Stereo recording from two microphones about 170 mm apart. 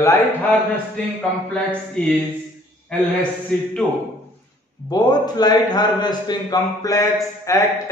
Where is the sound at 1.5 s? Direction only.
10° left (ahead or behind).